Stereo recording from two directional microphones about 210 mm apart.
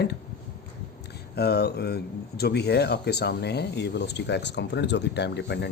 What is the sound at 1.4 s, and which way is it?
Speech, 50° left (ahead or behind).